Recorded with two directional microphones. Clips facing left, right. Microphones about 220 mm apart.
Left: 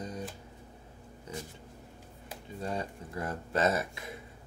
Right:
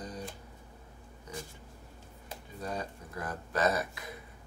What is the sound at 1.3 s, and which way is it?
Speech, 25° left (ahead or behind).